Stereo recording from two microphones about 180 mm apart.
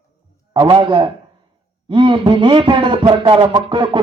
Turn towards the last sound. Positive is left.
turn(degrees=-25)  # may be behind; listen again after turning